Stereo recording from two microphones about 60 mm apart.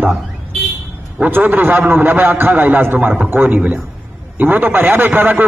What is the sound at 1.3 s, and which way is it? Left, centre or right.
A man's voice, right.